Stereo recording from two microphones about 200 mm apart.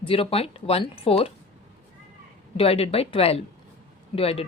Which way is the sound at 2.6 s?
30° left (ahead or behind).